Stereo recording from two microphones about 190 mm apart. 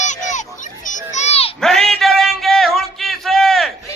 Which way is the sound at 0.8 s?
40° left (ahead or behind).